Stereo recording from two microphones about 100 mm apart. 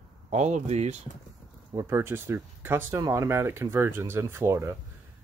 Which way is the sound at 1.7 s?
30° right (ahead or behind).